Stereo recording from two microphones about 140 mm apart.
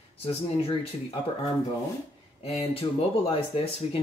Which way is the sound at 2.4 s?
50° left (ahead or behind).